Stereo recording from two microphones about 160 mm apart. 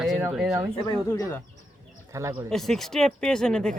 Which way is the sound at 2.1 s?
15° right (ahead or behind).